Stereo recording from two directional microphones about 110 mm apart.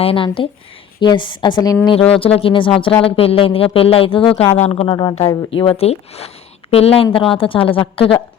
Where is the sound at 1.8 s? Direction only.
60° left (ahead or behind).